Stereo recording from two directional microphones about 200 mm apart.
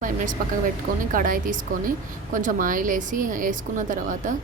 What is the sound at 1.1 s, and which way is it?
Speech, 40° right (ahead or behind).